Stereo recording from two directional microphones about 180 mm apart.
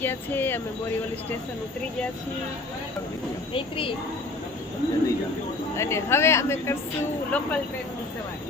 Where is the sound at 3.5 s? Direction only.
30° left (ahead or behind).